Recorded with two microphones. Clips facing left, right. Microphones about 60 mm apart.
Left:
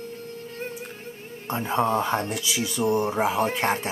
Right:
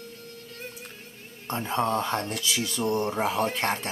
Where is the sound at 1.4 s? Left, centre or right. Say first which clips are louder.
Left 3 dB; centre.